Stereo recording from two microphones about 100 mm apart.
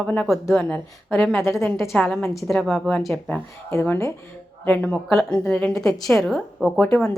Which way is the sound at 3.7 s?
20° left (ahead or behind).